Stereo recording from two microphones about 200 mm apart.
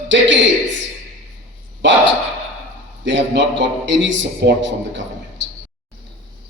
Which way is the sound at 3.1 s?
65° right (ahead or behind).